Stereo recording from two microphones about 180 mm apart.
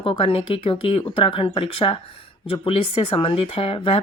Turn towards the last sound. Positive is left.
turn(degrees=30)  # may be behind; listen again after turning